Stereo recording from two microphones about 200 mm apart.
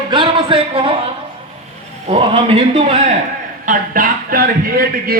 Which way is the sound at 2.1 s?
30° right (ahead or behind).